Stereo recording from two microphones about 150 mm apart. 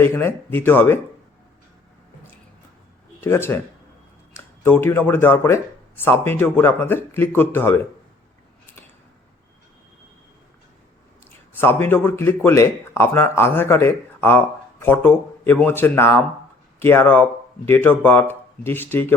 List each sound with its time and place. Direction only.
0.0 s speech: 15° left (ahead or behind)
3.2 s speech: 15° left (ahead or behind)
11.5 s speech: 15° left (ahead or behind)